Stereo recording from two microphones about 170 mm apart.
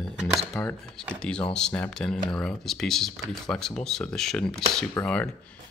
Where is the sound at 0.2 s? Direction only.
Centre (ahead or behind).